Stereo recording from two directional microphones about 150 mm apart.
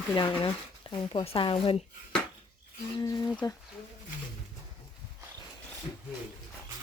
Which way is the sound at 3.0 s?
25° left (ahead or behind).